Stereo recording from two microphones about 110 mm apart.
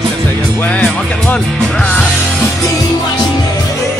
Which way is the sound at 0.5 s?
15° left (ahead or behind).